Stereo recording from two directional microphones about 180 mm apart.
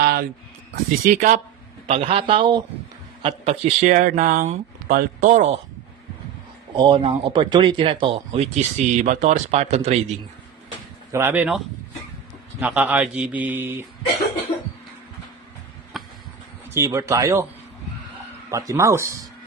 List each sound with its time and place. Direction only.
0.0 s a sound: 55° right (ahead or behind)
1.0 s speech: 45° right (ahead or behind)
1.9 s a man's voice: 30° right (ahead or behind)
6.7 s speech: 30° right (ahead or behind)
11.1 s a man's voice: 10° right (ahead or behind)
16.7 s a man's voice: 15° right (ahead or behind)
18.5 s a man's voice: 15° right (ahead or behind)